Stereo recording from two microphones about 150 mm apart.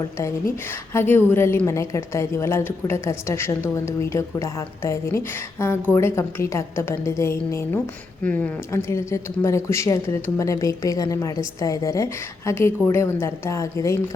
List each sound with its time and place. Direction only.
0.9 s a woman's voice: 15° left (ahead or behind)